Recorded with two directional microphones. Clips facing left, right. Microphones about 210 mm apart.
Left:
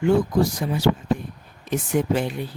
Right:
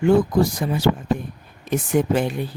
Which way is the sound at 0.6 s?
50° right (ahead or behind).